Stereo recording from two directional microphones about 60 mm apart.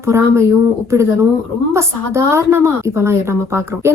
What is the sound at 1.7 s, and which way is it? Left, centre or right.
A woman's voice, right.